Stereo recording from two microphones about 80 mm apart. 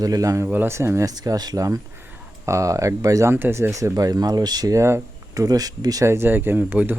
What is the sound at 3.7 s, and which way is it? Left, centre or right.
Speech, right.